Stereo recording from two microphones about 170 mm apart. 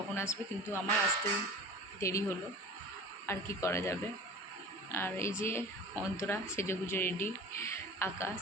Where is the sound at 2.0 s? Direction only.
15° left (ahead or behind).